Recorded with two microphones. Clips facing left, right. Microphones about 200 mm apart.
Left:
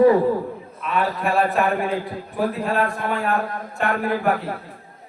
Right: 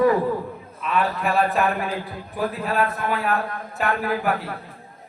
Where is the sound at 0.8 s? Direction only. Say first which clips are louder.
Even; centre (ahead or behind).